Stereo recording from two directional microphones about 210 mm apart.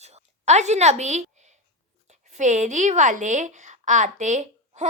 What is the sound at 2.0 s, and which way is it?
A woman's voice, 35° right (ahead or behind).